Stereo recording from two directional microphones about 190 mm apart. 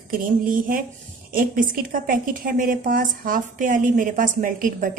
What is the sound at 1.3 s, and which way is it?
A woman's voice, 45° right (ahead or behind).